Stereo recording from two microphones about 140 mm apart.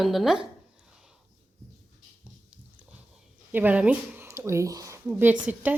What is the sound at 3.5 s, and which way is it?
Speech, 10° right (ahead or behind).